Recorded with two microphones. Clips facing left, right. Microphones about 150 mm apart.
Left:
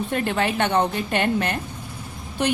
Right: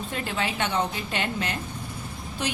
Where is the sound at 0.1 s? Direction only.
55° left (ahead or behind).